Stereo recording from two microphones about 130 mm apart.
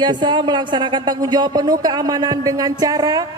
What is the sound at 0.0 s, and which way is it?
A woman's voice, 35° right (ahead or behind).